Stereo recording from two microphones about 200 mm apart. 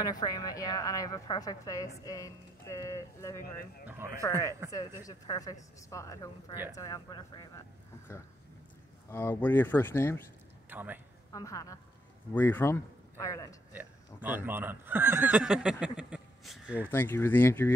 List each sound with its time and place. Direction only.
0.0 s a woman's voice: 20° left (ahead or behind)
3.8 s speech: 10° right (ahead or behind)
5.0 s a woman's voice: 20° left (ahead or behind)
9.1 s a woman's voice: 10° left (ahead or behind)
10.7 s a man's voice: 10° right (ahead or behind)
11.3 s a woman's voice: 15° left (ahead or behind)
13.7 s speech: 10° right (ahead or behind)
16.0 s a sound: 5° right (ahead or behind)
16.9 s a woman's voice: 10° left (ahead or behind)